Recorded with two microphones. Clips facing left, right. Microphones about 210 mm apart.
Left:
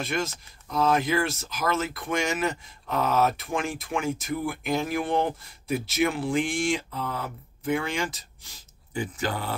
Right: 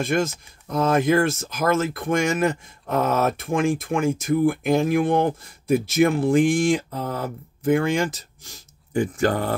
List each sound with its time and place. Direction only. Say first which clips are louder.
0.0 s speech: right 7 dB; 50° right (ahead or behind)